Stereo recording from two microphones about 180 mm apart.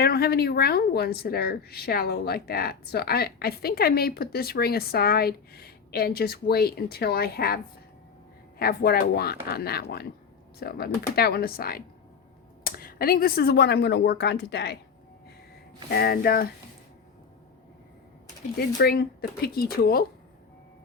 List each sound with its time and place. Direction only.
0.0 s a woman's voice: 60° left (ahead or behind)
15.9 s a woman's voice: 60° left (ahead or behind)
18.8 s a woman's voice: 60° left (ahead or behind)